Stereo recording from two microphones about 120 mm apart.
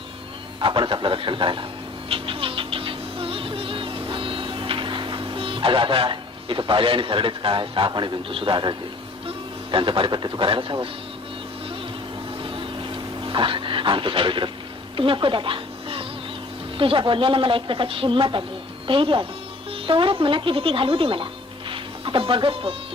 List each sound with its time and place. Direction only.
0.6 s a man's voice: 45° right (ahead or behind)
2.0 s music: 50° right (ahead or behind)
9.7 s speech: 45° right (ahead or behind)
12.4 s a sound: 45° right (ahead or behind)
14.9 s speech: 45° right (ahead or behind)
21.7 s music: 45° right (ahead or behind)